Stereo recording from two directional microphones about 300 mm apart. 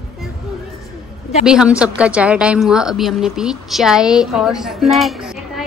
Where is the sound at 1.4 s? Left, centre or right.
Centre.